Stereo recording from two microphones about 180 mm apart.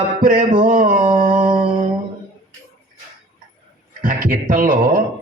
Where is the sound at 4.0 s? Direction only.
50° right (ahead or behind).